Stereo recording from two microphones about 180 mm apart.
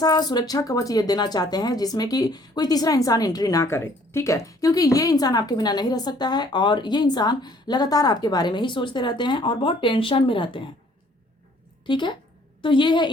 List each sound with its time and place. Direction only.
0.0 s speech: 20° left (ahead or behind)
11.9 s speech: 25° left (ahead or behind)